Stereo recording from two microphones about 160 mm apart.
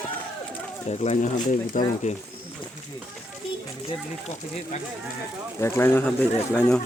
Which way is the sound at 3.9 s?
45° left (ahead or behind).